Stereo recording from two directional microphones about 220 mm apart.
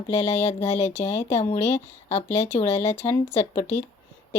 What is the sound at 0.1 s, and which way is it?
Speech, 15° left (ahead or behind).